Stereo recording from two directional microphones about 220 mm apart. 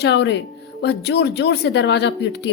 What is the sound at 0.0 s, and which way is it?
Speech, 50° left (ahead or behind).